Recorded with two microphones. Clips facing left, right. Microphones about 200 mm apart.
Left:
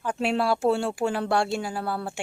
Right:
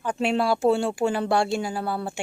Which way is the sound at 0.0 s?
5° left (ahead or behind).